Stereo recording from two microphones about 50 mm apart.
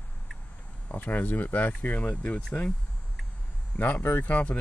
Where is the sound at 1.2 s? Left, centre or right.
Left.